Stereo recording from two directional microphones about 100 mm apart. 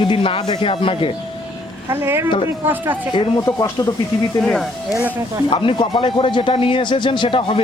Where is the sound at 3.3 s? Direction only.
40° left (ahead or behind).